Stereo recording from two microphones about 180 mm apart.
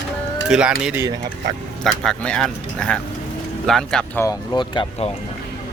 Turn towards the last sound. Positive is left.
turn(degrees=25)  # may be behind; listen again after turning